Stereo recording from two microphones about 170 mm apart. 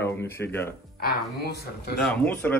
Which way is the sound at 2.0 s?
5° left (ahead or behind).